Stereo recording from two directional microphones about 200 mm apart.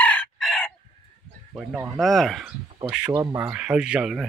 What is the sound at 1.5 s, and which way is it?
Speech, 10° right (ahead or behind).